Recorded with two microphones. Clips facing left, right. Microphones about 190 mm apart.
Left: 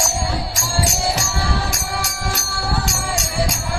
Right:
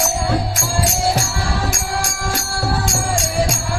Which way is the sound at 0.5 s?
55° right (ahead or behind).